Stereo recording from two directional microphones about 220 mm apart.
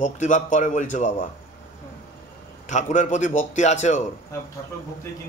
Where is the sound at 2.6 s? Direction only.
35° left (ahead or behind).